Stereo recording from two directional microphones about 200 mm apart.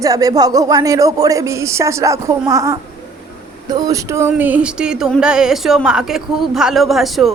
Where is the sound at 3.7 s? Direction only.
20° right (ahead or behind); by 7.3 s centre (ahead or behind).